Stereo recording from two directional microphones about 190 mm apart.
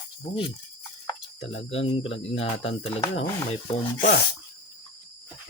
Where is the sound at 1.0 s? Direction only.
30° left (ahead or behind).